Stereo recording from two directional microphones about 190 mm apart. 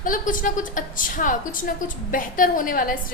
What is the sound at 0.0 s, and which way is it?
A woman's voice, 45° left (ahead or behind).